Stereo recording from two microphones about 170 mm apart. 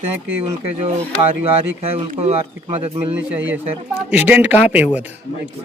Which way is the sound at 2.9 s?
10° right (ahead or behind).